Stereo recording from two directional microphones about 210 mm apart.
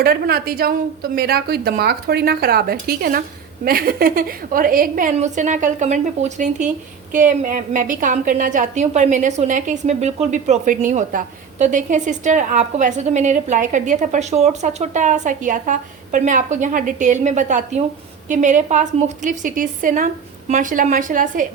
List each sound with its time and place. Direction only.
0.0 s a woman's voice: 45° right (ahead or behind)